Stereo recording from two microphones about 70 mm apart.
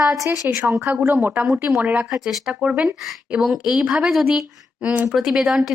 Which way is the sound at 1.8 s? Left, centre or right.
Centre.